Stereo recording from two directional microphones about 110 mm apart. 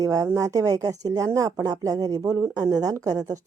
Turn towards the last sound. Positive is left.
turn(degrees=-35)  # may be behind; listen again after turning